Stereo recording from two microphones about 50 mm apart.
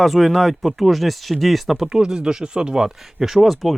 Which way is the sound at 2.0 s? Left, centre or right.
Centre.